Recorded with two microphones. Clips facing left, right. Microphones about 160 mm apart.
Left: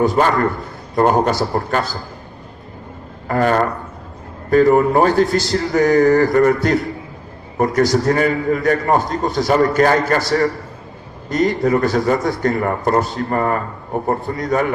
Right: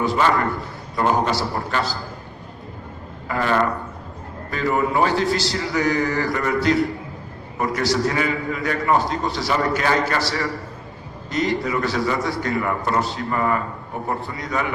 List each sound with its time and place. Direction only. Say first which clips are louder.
0.0 s a man's voice: left 4 dB; 50° left (ahead or behind)
3.2 s a man's voice: left 4 dB; 45° left (ahead or behind)